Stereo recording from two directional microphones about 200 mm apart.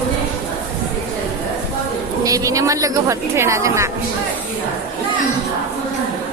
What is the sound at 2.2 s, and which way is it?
A woman's voice, 15° right (ahead or behind).